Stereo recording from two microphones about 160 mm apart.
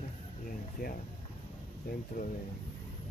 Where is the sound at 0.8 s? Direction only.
70° left (ahead or behind).